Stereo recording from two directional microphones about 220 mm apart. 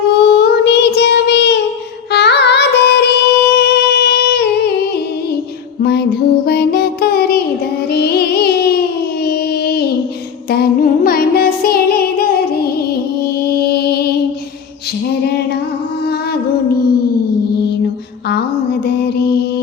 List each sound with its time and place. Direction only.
0.1 s child singing: 50° left (ahead or behind)
2.0 s music: 50° left (ahead or behind)
5.8 s music: 50° left (ahead or behind)
9.2 s a sound: 45° left (ahead or behind)
10.5 s music: 45° left (ahead or behind)
15.3 s music: 50° left (ahead or behind)
18.9 s mantra: 50° left (ahead or behind)